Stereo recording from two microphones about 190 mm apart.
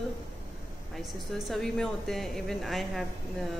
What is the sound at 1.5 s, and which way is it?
Speech, centre (ahead or behind).